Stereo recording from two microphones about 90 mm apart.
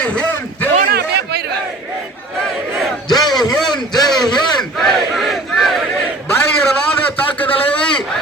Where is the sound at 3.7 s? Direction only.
50° left (ahead or behind).